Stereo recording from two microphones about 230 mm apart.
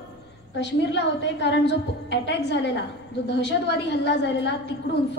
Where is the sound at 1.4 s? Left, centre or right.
Left.